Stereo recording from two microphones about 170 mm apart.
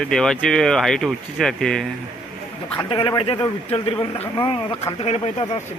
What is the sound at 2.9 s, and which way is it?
Speech, 30° left (ahead or behind).